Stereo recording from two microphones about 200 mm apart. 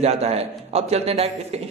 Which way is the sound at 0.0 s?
30° right (ahead or behind).